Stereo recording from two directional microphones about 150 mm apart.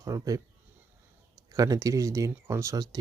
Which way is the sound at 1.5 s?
20° right (ahead or behind).